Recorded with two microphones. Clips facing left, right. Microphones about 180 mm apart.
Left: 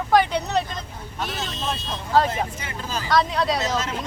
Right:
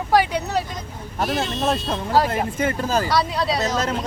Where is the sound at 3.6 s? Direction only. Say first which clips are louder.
Right 3 dB; 40° right (ahead or behind).